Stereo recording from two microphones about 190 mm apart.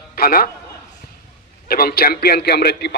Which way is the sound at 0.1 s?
50° left (ahead or behind).